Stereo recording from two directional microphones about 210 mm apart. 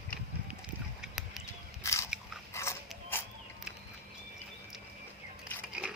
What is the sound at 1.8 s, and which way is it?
Biting, 15° left (ahead or behind).